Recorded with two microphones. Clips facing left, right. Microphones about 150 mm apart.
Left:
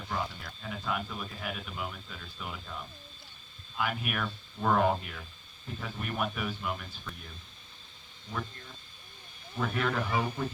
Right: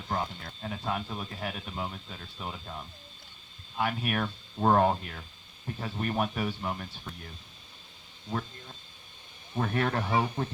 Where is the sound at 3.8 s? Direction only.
35° right (ahead or behind).